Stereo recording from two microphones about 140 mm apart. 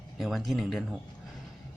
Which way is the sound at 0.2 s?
Centre (ahead or behind).